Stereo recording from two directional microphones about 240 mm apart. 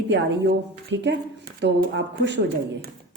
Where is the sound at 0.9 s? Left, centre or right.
Right.